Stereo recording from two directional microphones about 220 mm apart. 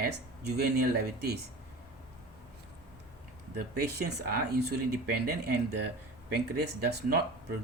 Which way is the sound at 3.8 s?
45° right (ahead or behind).